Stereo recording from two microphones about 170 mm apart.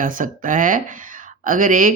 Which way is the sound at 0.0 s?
50° right (ahead or behind).